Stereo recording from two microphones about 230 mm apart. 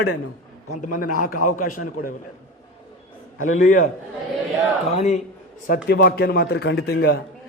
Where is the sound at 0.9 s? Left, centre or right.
Left.